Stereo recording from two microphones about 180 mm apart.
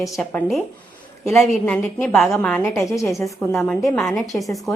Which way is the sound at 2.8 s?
15° left (ahead or behind).